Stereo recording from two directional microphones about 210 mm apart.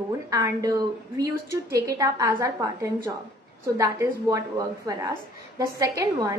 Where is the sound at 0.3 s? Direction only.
15° right (ahead or behind).